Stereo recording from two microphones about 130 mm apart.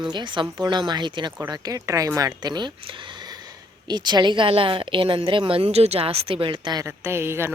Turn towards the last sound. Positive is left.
turn(degrees=-20)  # may be behind; listen again after turning